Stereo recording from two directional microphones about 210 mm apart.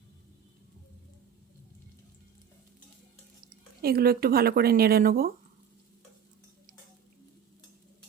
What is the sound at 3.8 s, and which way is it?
Speech, 45° right (ahead or behind).